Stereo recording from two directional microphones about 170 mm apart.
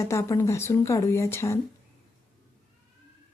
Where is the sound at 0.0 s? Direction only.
15° left (ahead or behind).